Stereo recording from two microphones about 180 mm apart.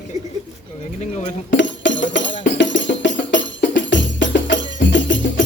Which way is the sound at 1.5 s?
90° left.